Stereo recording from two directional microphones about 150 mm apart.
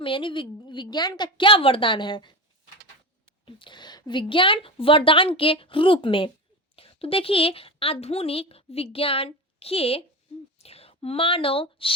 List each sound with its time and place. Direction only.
0.0 s a woman's voice: 35° left (ahead or behind)
3.4 s a woman's voice: 30° left (ahead or behind)